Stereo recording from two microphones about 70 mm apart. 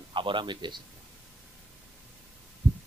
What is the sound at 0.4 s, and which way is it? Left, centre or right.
Speech, right.